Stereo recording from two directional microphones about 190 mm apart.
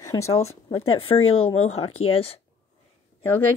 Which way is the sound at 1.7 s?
30° left (ahead or behind).